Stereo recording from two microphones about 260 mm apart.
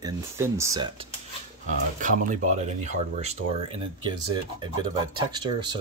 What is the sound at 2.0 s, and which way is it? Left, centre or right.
Speech, right.